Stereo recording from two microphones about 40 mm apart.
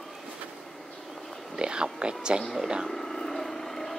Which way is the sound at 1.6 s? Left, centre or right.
Right.